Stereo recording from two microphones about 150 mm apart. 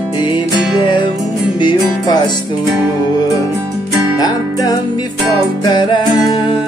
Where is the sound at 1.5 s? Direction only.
30° left (ahead or behind).